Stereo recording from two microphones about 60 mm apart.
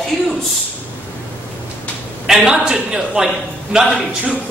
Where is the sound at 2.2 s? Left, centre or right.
Centre.